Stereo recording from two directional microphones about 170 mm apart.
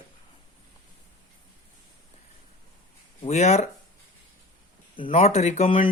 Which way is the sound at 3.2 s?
40° left (ahead or behind).